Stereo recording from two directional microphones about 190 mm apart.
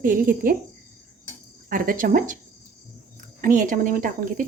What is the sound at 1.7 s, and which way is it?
Speech, 45° right (ahead or behind).